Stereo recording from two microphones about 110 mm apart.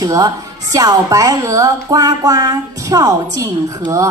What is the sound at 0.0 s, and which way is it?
A woman's voice, 35° right (ahead or behind).